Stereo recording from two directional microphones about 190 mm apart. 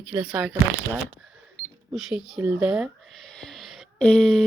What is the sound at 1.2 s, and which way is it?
Cash register, centre (ahead or behind).